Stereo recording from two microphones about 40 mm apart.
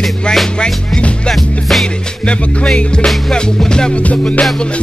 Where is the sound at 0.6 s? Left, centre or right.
Left.